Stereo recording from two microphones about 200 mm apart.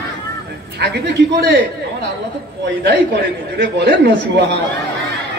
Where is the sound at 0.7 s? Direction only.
55° right (ahead or behind).